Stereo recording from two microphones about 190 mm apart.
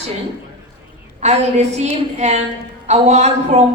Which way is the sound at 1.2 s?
35° right (ahead or behind).